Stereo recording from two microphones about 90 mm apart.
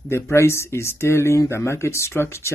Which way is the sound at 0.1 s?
30° left (ahead or behind).